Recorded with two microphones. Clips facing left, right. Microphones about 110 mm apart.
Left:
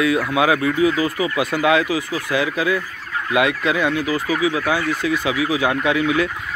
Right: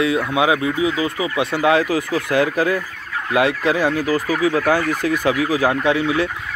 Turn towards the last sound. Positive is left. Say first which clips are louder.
# even
turn(degrees=-30)  # may be behind; listen again after turning